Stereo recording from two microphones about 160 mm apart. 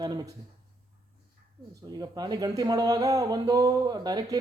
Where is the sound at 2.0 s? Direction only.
25° right (ahead or behind).